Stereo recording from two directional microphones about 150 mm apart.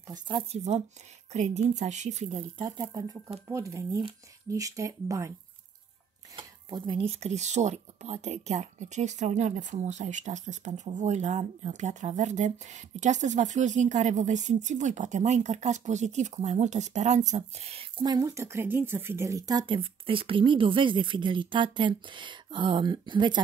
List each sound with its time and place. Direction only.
0.1 s speech: 30° right (ahead or behind)
0.5 s speech: 50° right (ahead or behind)
2.8 s speech: 25° right (ahead or behind)
6.3 s speech: 35° right (ahead or behind)
18.0 s speech: 25° right (ahead or behind)